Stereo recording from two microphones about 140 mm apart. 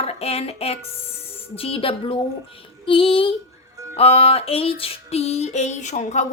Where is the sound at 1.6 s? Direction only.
45° left (ahead or behind).